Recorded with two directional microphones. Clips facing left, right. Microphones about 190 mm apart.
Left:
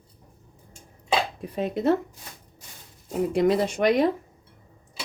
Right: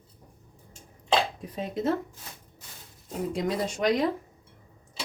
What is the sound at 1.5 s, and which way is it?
Speech, 60° left (ahead or behind).